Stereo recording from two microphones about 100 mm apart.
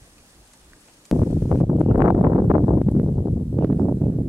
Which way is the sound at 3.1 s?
20° right (ahead or behind).